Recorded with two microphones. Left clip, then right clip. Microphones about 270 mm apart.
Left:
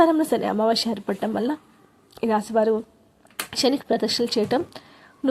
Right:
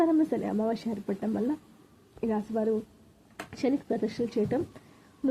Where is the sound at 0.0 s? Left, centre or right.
Centre.